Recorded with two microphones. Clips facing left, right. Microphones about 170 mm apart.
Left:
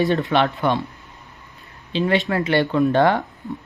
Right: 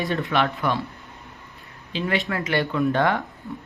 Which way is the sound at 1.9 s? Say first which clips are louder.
Left 6 dB; 30° left (ahead or behind).